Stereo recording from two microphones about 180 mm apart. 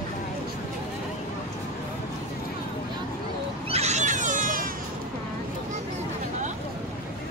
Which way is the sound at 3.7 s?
35° right (ahead or behind).